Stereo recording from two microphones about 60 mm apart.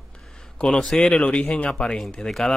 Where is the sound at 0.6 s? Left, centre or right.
Centre.